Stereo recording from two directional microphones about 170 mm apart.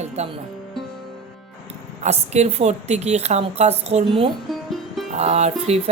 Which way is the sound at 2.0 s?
40° right (ahead or behind).